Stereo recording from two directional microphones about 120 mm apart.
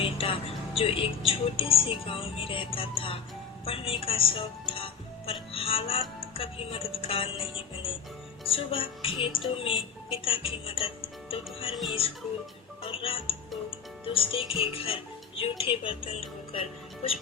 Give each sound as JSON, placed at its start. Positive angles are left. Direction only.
{"t": 0.0, "sound": "speech", "side_deg": 50}
{"t": 11.7, "sound": "speech", "side_deg": 0}
{"t": 12.8, "sound": "speech", "side_deg": 50}